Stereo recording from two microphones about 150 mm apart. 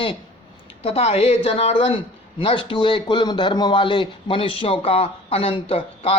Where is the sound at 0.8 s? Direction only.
45° left (ahead or behind).